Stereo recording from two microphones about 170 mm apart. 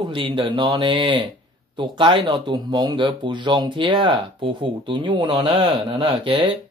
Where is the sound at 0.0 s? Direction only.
25° right (ahead or behind).